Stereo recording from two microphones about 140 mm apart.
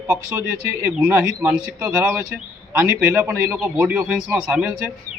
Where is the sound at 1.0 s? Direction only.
25° right (ahead or behind).